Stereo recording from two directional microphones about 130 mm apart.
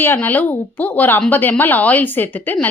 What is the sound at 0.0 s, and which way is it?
A woman's voice, 15° left (ahead or behind).